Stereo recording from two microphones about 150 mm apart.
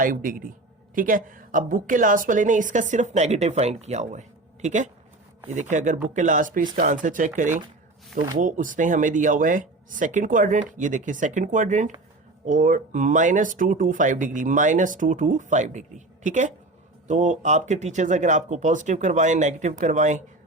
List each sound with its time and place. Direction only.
0.0 s speech: 65° right (ahead or behind)